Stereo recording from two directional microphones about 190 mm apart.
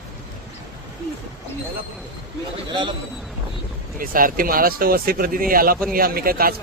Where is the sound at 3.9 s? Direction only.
50° right (ahead or behind).